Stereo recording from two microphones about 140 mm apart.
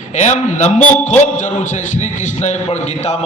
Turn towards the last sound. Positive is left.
turn(degrees=55)  # may be behind; listen again after turning